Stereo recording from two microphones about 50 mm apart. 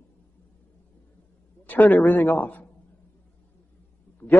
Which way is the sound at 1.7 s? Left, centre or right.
Left.